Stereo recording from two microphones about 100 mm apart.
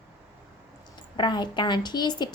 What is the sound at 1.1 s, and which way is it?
A woman's voice, 50° left (ahead or behind).